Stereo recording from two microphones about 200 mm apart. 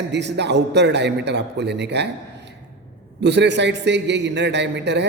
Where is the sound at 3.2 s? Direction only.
60° right (ahead or behind).